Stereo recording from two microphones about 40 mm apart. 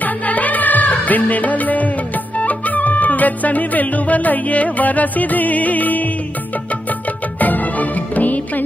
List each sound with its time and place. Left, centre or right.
0.0 s music: left
7.3 s music: left